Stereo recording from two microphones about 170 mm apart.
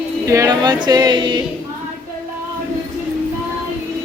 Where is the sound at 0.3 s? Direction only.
20° right (ahead or behind).